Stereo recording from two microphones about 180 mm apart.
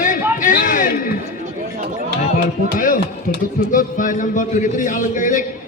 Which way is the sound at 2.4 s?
50° left (ahead or behind).